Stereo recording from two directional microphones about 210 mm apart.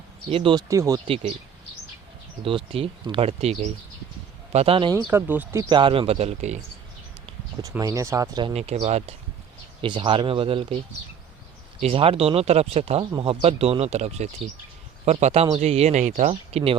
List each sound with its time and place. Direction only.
0.3 s speech: 25° right (ahead or behind)
1.0 s speech: 25° right (ahead or behind)
2.4 s speech: 25° right (ahead or behind); by 5.6 s 10° right (ahead or behind)
5.6 s speech: 25° right (ahead or behind)
7.6 s speech: 15° right (ahead or behind)
11.8 s speech: 25° right (ahead or behind)